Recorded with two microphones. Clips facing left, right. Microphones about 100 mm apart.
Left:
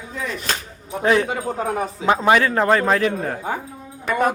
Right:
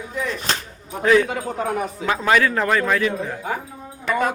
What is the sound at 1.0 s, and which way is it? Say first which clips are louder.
A man's voice: right 1 dB; 25° left (ahead or behind).